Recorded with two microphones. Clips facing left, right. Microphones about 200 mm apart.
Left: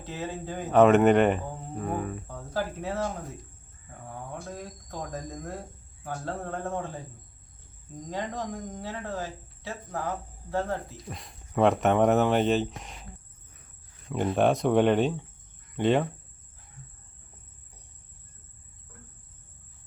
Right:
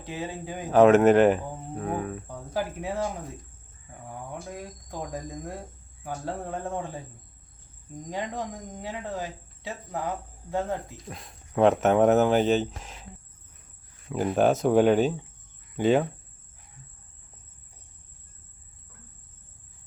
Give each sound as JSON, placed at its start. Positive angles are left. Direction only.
{"t": 0.0, "sound": "speech", "side_deg": -15}
{"t": 0.7, "sound": "speech", "side_deg": 0}
{"t": 2.2, "sound": "speech", "side_deg": -15}
{"t": 8.1, "sound": "speech", "side_deg": -15}
{"t": 11.1, "sound": "speech", "side_deg": 0}
{"t": 14.1, "sound": "speech", "side_deg": -5}